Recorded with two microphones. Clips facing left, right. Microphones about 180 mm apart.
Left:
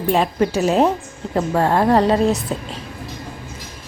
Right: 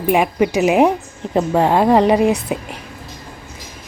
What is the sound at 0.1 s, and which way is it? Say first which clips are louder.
A woman's voice: right 2 dB; 15° right (ahead or behind).